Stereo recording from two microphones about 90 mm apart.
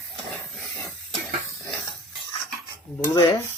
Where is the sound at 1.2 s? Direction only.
15° left (ahead or behind).